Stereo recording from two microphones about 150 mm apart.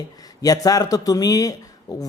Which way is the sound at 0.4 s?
25° left (ahead or behind).